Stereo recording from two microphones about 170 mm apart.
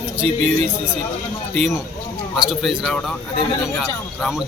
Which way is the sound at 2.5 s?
Centre (ahead or behind).